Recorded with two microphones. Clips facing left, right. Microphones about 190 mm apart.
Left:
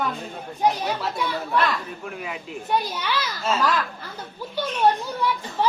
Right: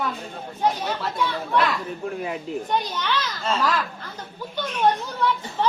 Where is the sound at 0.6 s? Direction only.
10° left (ahead or behind).